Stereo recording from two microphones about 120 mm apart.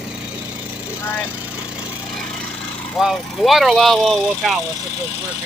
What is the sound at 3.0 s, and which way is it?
Speech, centre (ahead or behind).